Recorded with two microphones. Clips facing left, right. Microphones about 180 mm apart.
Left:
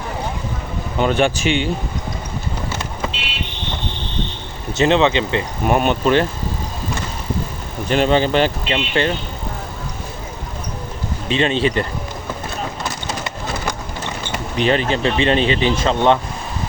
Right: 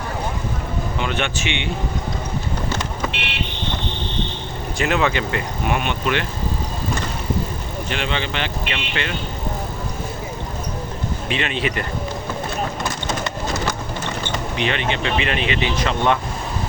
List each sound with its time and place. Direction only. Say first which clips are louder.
0.9 s speech: left 10 dB; 40° left (ahead or behind)
4.8 s speech: left 5 dB; 25° left (ahead or behind)
5.6 s speech: left 7 dB; 40° left (ahead or behind)
7.9 s speech: left 11 dB; 40° left (ahead or behind)
11.3 s speech: left 7 dB; 30° left (ahead or behind)
14.5 s speech: left 7 dB; 35° left (ahead or behind)